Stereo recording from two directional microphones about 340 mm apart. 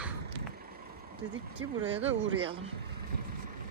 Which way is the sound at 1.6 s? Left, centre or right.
Right.